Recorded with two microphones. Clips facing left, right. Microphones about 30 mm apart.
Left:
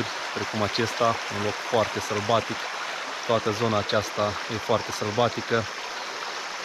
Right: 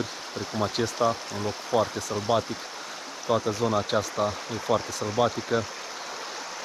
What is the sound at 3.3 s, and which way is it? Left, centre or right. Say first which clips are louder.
Speech: left 1 dB; left.